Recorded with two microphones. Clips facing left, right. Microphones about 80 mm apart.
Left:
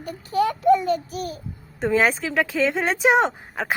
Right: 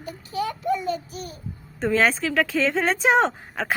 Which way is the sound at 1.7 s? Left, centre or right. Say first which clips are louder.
Left 1 dB; centre.